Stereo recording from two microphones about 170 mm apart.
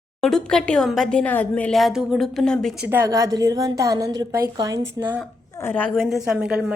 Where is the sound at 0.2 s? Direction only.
5° left (ahead or behind).